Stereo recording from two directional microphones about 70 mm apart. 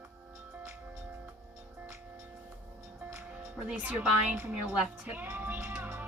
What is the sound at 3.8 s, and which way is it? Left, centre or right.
Music, right.